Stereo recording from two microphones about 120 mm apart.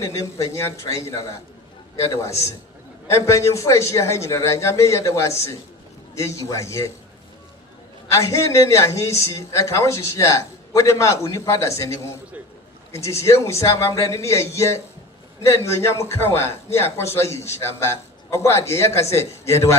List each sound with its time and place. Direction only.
0.0 s speech: 25° left (ahead or behind)
8.1 s speech: 25° left (ahead or behind)